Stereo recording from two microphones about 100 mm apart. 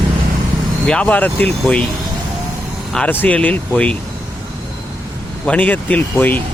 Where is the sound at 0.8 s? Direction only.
10° left (ahead or behind).